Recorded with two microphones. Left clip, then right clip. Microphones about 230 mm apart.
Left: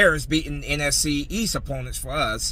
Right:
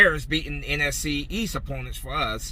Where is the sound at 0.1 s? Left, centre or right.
Left.